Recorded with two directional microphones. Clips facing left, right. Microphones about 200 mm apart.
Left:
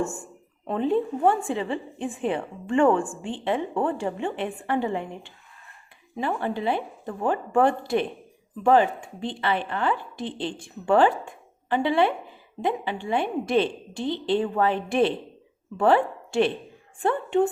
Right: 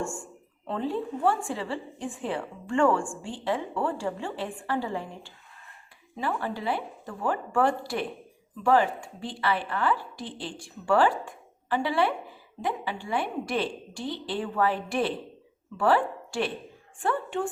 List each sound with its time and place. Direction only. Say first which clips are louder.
0.0 s a woman's voice: left 4 dB; 20° left (ahead or behind)